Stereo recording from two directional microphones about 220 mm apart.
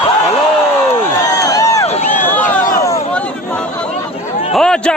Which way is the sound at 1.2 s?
15° left (ahead or behind).